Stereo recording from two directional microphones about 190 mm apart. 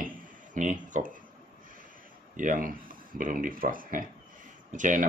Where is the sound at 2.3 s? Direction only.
45° right (ahead or behind).